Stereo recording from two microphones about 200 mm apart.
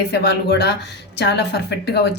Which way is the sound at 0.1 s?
55° left (ahead or behind).